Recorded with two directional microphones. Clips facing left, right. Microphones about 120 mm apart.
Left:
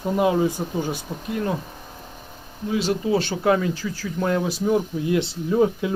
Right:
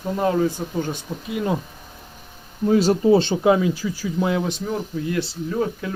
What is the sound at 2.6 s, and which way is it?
Speech, 40° right (ahead or behind).